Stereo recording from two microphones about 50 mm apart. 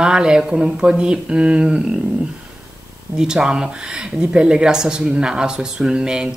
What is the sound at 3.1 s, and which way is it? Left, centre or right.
Speech, centre.